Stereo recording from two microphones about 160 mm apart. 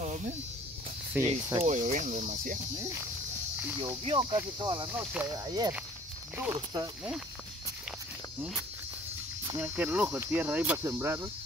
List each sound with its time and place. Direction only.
0.0 s snake: 45° right (ahead or behind)
1.1 s speech: 20° right (ahead or behind)
1.6 s cricket: 50° right (ahead or behind)
2.8 s speech: 15° right (ahead or behind)
4.1 s speech: 25° right (ahead or behind)
4.9 s speech: 10° right (ahead or behind)
5.3 s speech: 25° right (ahead or behind)
6.3 s speech: 10° right (ahead or behind)
9.6 s speech: 10° right (ahead or behind)